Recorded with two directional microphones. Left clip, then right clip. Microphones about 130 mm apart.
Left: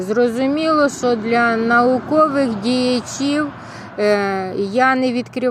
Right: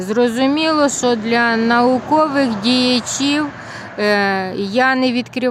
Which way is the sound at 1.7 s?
25° right (ahead or behind).